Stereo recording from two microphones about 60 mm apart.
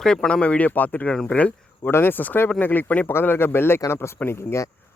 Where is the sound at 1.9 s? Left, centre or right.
Left.